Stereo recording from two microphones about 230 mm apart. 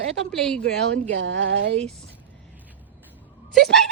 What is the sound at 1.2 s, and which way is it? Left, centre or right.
Speech, right.